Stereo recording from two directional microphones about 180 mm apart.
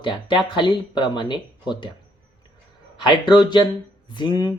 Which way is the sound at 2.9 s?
25° left (ahead or behind).